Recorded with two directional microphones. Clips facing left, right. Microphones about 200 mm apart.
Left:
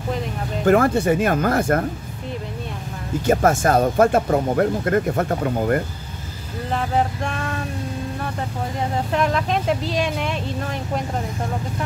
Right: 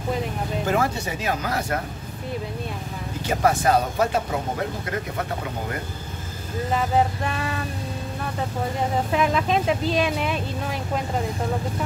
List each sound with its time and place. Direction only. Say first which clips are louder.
0.7 s speech: left 10 dB; 55° left (ahead or behind)
3.3 s speech: left 3 dB; 45° left (ahead or behind)
6.7 s speech: even; 5° right (ahead or behind)
9.1 s speech: left 1 dB; 5° right (ahead or behind)